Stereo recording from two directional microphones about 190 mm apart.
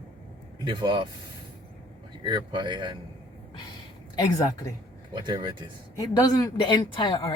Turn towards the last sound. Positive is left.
turn(degrees=25)  # may be behind; listen again after turning